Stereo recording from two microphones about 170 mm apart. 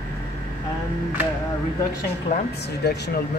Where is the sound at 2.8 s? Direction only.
75° left (ahead or behind).